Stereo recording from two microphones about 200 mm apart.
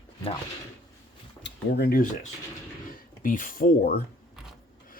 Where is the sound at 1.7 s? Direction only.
50° left (ahead or behind).